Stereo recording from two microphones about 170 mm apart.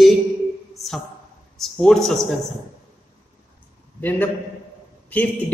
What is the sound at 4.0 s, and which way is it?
Speech, 10° left (ahead or behind).